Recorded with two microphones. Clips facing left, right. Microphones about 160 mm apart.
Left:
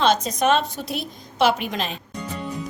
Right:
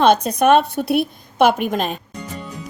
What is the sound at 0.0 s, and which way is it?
A woman's voice, 60° right (ahead or behind).